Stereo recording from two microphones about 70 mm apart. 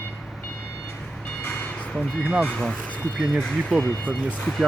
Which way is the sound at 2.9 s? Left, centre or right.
Left.